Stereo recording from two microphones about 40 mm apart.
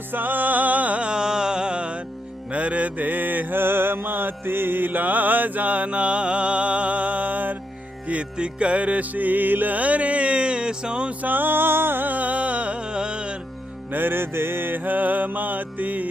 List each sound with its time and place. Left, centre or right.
0.1 s music: right
1.0 s music: centre; by 7.5 s right
8.0 s music: right
11.2 s music: right
12.0 s music: right
13.9 s music: right